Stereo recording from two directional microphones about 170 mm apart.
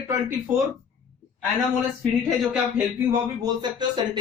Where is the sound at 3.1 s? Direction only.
25° right (ahead or behind).